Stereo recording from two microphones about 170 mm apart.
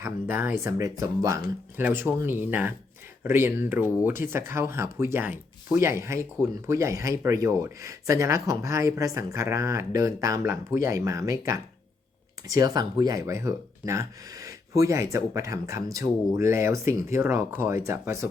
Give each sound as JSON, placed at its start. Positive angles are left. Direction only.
{"t": 0.0, "sound": "speech", "side_deg": -10}